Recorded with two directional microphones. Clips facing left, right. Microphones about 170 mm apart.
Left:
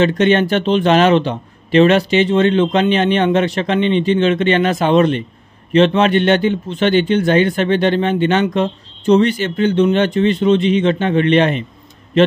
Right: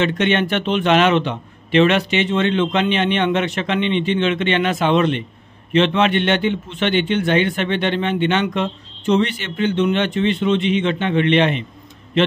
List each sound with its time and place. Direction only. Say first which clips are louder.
0.0 s speech: left 5 dB; 35° left (ahead or behind)